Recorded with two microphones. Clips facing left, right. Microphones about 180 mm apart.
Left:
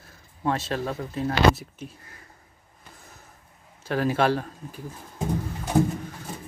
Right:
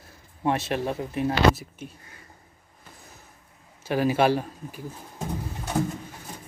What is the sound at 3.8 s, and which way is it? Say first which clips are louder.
Speech: right 1 dB; 5° right (ahead or behind).